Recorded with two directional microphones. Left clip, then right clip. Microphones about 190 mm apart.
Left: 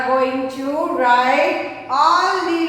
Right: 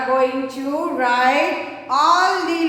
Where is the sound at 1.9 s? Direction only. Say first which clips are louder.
Left 1 dB; 50° right (ahead or behind).